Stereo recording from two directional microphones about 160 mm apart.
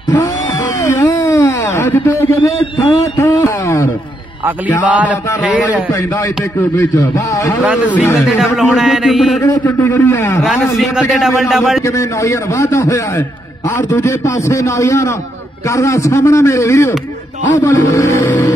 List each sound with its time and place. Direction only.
0.8 s speech: 20° left (ahead or behind)
4.8 s speech: 10° right (ahead or behind)
6.8 s a man's voice: 20° left (ahead or behind)
8.5 s a man's voice: 5° right (ahead or behind)
9.4 s a man's voice: 20° left (ahead or behind)
10.4 s a man's voice: centre (ahead or behind)
12.2 s a man's voice: 20° left (ahead or behind)